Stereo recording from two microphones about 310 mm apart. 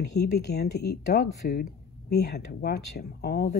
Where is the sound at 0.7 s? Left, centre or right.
Left.